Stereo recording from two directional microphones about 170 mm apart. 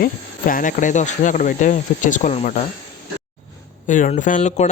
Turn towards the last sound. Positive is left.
turn(degrees=40)  # may be behind; listen again after turning